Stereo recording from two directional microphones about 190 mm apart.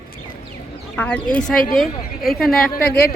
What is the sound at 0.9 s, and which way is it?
Speech, 10° left (ahead or behind).